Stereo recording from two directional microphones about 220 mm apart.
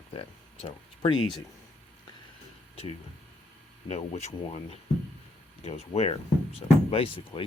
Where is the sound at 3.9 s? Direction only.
30° left (ahead or behind).